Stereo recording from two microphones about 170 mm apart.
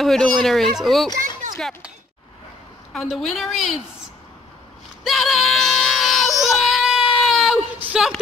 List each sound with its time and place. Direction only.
0.0 s speech: centre (ahead or behind)
2.9 s speech: centre (ahead or behind)
5.0 s a sound: centre (ahead or behind)
6.4 s baby cry: centre (ahead or behind)